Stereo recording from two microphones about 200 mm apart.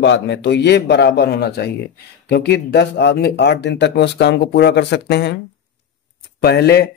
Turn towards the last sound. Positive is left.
turn(degrees=55)  # may be behind; listen again after turning